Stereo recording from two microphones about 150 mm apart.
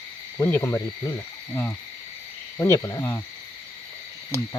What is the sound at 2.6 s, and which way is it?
Speech, 20° left (ahead or behind).